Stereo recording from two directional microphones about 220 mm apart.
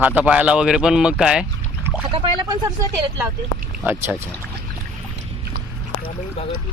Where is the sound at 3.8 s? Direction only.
10° right (ahead or behind).